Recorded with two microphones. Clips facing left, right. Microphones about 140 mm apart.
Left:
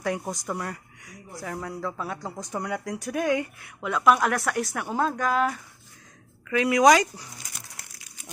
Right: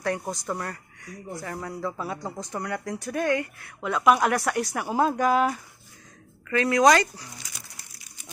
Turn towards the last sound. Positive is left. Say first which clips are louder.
# left 1 dB
turn(degrees=10)  # may be behind; listen again after turning